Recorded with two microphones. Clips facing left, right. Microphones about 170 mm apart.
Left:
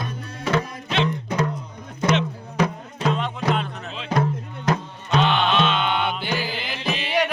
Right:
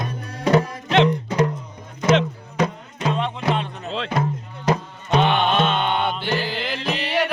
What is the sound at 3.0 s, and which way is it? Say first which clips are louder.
Music: even; 5° right (ahead or behind).